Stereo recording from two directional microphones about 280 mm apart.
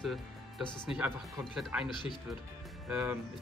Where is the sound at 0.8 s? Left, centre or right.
Centre.